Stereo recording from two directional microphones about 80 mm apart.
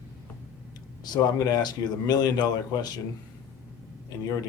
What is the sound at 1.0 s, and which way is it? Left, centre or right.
A man's voice, left.